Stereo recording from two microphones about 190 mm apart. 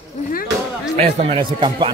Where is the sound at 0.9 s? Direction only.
35° right (ahead or behind).